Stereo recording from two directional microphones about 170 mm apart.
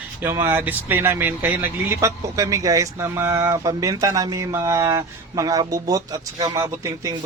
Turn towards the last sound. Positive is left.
turn(degrees=-20)  # may be behind; listen again after turning